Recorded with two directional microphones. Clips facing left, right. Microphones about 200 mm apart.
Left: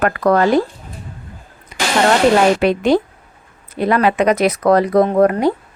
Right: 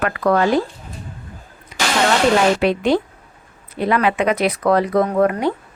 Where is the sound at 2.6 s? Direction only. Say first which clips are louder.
Left 3 dB; 45° left (ahead or behind).